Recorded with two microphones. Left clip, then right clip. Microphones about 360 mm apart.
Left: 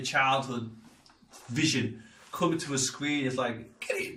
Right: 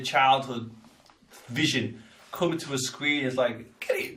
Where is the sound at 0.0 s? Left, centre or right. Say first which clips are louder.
Right 5 dB; centre.